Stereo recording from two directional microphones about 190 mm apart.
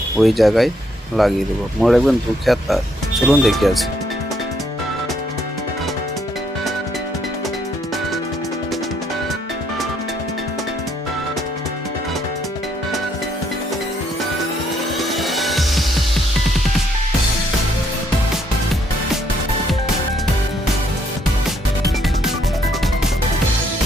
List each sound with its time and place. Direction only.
0.2 s speech: centre (ahead or behind)
14.9 s music: centre (ahead or behind)